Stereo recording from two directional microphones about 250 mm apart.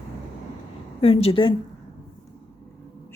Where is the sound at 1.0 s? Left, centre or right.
Left.